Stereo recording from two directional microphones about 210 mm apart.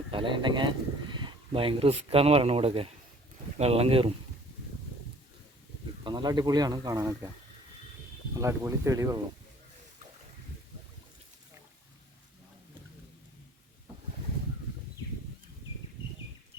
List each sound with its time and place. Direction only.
0.1 s speech: 25° right (ahead or behind)
6.1 s speech: 20° right (ahead or behind)
8.4 s speech: 15° right (ahead or behind)